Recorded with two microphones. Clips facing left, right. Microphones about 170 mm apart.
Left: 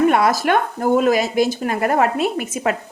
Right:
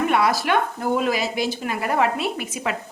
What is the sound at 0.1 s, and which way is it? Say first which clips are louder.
Speech: left 4 dB; 45° left (ahead or behind).